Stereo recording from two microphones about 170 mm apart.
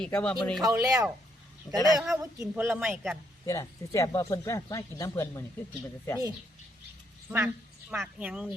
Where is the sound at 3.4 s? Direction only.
15° left (ahead or behind).